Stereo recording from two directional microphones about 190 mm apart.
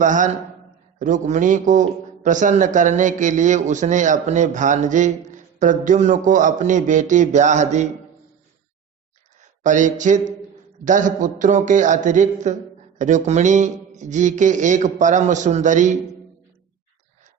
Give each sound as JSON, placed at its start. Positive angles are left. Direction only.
{"t": 0.0, "sound": "a man's voice", "side_deg": -40}
{"t": 9.6, "sound": "a man's voice", "side_deg": -40}